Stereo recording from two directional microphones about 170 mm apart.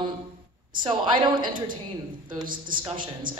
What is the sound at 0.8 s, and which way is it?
Speech, 25° right (ahead or behind).